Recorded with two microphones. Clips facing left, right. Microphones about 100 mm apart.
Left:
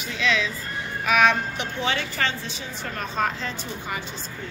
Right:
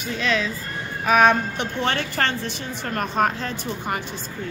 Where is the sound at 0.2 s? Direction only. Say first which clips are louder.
Even; 45° right (ahead or behind).